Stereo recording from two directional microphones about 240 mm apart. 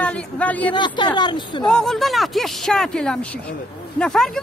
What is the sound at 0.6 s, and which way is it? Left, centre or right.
Speech, centre.